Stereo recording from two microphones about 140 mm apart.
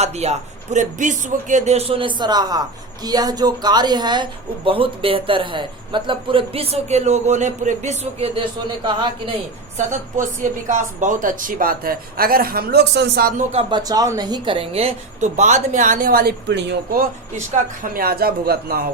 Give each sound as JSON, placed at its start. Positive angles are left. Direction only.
{"t": 0.0, "sound": "speech", "side_deg": -50}
{"t": 8.4, "sound": "speech", "side_deg": -35}
{"t": 9.7, "sound": "speech", "side_deg": -60}
{"t": 13.5, "sound": "a woman's voice", "side_deg": -40}
{"t": 17.5, "sound": "speech", "side_deg": -90}